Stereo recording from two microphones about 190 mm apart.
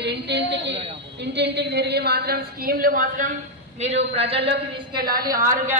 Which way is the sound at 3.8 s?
35° right (ahead or behind).